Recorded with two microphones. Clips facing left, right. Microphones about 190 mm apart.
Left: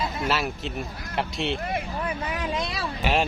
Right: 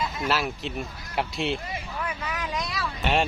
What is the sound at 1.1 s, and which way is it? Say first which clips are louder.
Speech: even; centre (ahead or behind).